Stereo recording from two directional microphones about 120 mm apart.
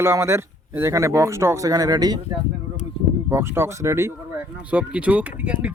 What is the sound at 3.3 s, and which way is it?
Speech, 20° right (ahead or behind).